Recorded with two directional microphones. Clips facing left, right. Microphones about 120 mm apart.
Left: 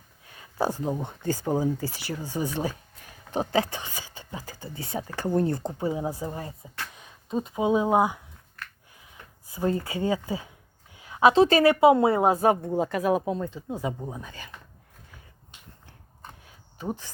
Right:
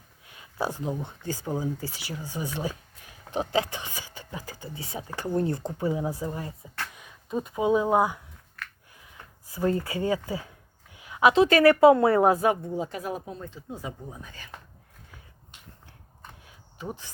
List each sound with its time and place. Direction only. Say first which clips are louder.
0.3 s a sound: left 3 dB; 35° left (ahead or behind)
1.0 s speech: left 5 dB; 50° left (ahead or behind); by 4.7 s 30° left (ahead or behind)
4.8 s speech: left 4 dB; 45° left (ahead or behind)
5.7 s speech: even; 25° left (ahead or behind)
9.5 s speech: right 1 dB; 20° left (ahead or behind)
10.9 s a sound: left 2 dB; 30° left (ahead or behind)
11.6 s speech: right 1 dB; 15° left (ahead or behind)
12.6 s speech: left 6 dB; 60° left (ahead or behind); by 13.9 s 80° left
16.7 s speech: left 4 dB; 35° left (ahead or behind)